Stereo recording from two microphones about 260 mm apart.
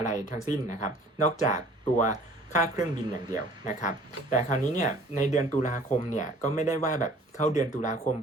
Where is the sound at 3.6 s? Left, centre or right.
Left.